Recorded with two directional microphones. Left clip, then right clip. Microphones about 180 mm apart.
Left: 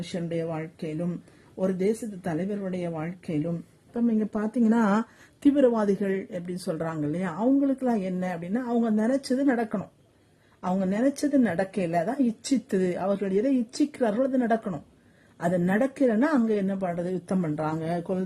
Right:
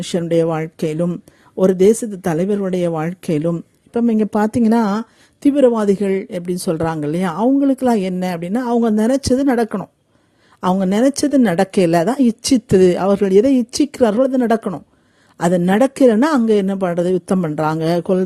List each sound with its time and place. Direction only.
0.1 s speech: 45° right (ahead or behind)
4.8 s a woman's voice: 20° right (ahead or behind); by 18.2 s 40° right (ahead or behind)